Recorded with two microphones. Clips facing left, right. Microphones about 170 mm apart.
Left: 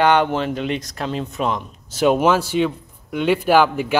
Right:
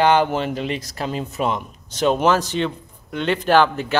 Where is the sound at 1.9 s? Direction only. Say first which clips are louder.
Left 2 dB; 5° left (ahead or behind).